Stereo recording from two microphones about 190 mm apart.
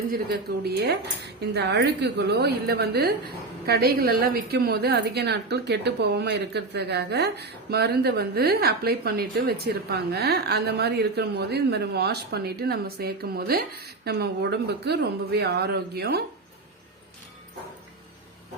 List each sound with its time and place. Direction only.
0.1 s a woman's voice: 55° right (ahead or behind)